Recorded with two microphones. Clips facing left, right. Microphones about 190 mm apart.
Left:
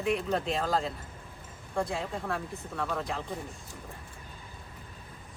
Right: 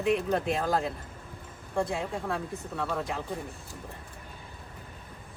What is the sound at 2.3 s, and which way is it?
Speech, 5° right (ahead or behind).